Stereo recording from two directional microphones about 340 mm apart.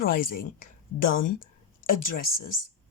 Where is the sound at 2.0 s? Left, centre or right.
Left.